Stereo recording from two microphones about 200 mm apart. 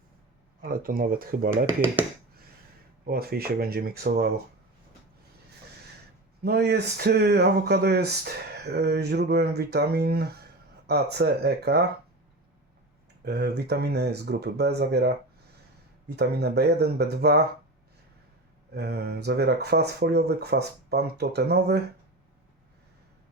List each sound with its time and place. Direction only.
0.6 s speech: 45° right (ahead or behind)
3.1 s speech: 50° right (ahead or behind)
6.4 s speech: 55° right (ahead or behind)
13.2 s speech: 55° right (ahead or behind)
18.7 s speech: 55° right (ahead or behind)